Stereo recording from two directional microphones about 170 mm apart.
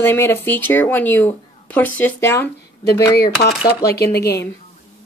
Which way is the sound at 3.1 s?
70° left (ahead or behind).